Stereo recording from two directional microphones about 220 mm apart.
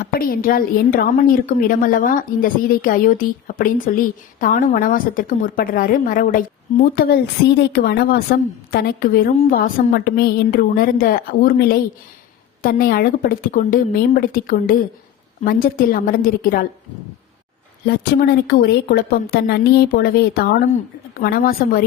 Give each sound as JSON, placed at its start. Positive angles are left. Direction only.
{"t": 0.0, "sound": "a woman's voice", "side_deg": 40}
{"t": 17.8, "sound": "a woman's voice", "side_deg": 45}